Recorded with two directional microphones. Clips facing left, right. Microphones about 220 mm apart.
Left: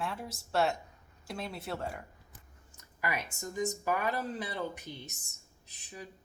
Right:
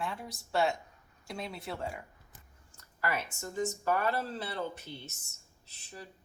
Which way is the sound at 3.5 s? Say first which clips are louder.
Right 1 dB; 15° left (ahead or behind).